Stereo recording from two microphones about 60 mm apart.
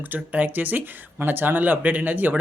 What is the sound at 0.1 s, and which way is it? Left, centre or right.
Speech, right.